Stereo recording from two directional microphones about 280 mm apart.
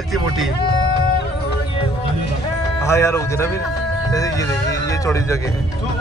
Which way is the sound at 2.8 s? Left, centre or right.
Centre.